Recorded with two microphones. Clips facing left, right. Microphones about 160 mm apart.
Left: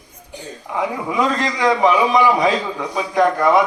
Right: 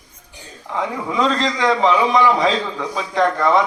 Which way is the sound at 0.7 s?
10° left (ahead or behind).